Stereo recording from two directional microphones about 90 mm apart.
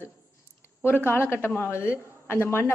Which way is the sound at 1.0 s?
25° left (ahead or behind).